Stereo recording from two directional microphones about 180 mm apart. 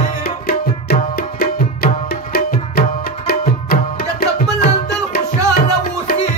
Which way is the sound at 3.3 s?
55° left (ahead or behind).